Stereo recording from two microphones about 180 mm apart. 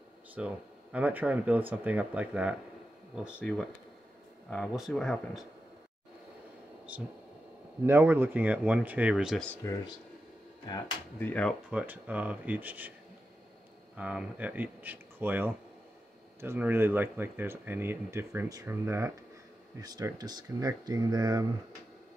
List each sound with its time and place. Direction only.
0.4 s speech: 5° right (ahead or behind)
3.3 s speech: 5° left (ahead or behind)
6.9 s speech: 10° right (ahead or behind)
11.1 s speech: 10° left (ahead or behind)
11.7 s speech: 10° right (ahead or behind)
13.9 s speech: 5° right (ahead or behind)